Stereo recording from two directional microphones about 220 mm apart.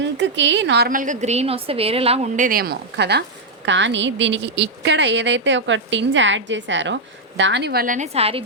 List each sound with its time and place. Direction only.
0.0 s a woman's voice: 55° right (ahead or behind); by 8.4 s 25° right (ahead or behind)